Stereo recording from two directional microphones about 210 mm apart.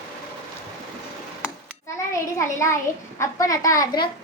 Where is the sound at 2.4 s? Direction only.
15° left (ahead or behind).